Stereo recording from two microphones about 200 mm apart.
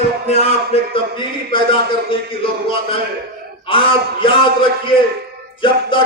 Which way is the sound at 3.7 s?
25° left (ahead or behind).